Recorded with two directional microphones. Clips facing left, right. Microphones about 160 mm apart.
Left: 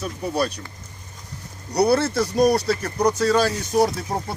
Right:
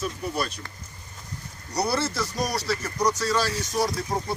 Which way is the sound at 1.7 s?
60° left (ahead or behind).